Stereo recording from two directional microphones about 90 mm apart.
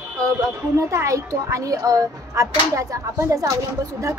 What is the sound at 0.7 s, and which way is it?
A woman's voice, 35° right (ahead or behind).